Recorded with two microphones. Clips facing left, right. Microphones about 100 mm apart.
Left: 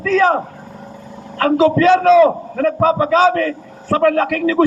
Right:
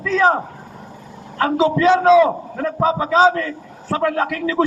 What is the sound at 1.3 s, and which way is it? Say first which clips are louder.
A man's voice: left 4 dB; 20° right (ahead or behind).